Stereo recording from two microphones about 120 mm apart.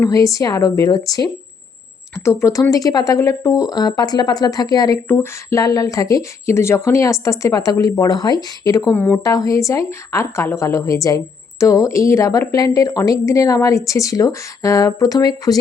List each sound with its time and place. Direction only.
0.0 s a woman's voice: 30° left (ahead or behind)
5.0 s a woman's voice: 20° left (ahead or behind)